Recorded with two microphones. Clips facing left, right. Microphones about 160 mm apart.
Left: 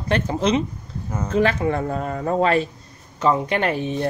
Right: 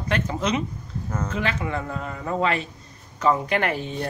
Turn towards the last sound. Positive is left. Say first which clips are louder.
# left 4 dB
turn(degrees=25)  # may be behind; listen again after turning